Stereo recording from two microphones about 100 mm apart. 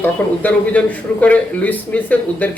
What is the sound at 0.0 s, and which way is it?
A man's voice, 15° left (ahead or behind).